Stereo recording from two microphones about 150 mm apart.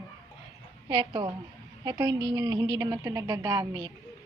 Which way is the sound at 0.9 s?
30° right (ahead or behind).